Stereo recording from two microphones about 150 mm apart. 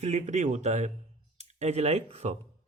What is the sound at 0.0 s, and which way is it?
Speech, 50° right (ahead or behind).